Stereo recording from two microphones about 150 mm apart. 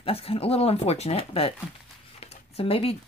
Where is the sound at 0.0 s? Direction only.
40° left (ahead or behind).